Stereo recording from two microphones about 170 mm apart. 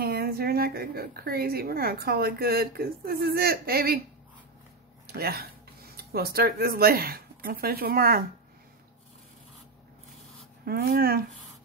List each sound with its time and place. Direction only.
0.0 s a woman's voice: 65° right (ahead or behind)
5.0 s speech: 65° right (ahead or behind)
10.6 s a woman's voice: 65° right (ahead or behind)